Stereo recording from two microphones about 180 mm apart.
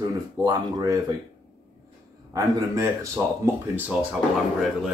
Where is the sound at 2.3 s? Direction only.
20° right (ahead or behind).